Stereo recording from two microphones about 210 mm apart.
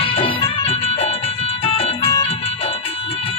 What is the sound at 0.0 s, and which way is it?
Music, 25° left (ahead or behind).